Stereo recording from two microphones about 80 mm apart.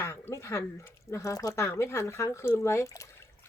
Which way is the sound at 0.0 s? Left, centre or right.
Left.